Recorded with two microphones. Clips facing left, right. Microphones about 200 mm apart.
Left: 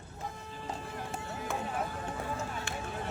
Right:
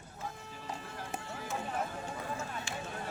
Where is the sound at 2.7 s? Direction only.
55° left (ahead or behind).